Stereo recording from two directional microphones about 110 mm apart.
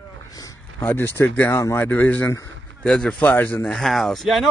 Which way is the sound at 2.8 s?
5° left (ahead or behind).